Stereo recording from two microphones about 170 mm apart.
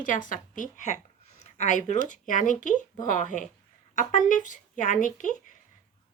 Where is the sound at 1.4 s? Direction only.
40° left (ahead or behind).